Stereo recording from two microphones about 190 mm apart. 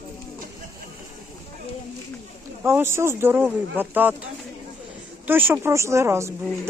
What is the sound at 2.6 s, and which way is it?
Speech, 15° right (ahead or behind).